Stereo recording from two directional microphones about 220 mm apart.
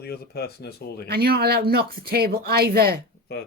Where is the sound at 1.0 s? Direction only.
45° right (ahead or behind).